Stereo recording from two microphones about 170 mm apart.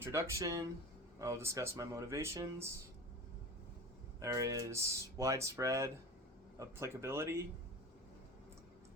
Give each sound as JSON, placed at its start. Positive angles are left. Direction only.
{"t": 0.0, "sound": "speech", "side_deg": -15}
{"t": 4.2, "sound": "speech", "side_deg": -20}